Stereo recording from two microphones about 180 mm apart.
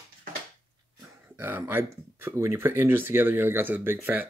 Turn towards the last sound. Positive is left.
turn(degrees=-10)  # may be behind; listen again after turning